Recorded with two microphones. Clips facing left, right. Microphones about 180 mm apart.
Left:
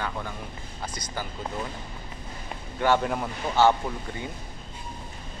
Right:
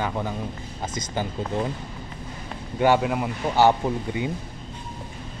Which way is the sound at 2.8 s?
10° right (ahead or behind).